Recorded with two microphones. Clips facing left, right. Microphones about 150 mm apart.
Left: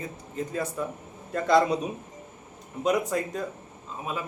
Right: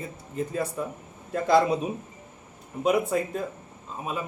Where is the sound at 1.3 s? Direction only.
5° right (ahead or behind).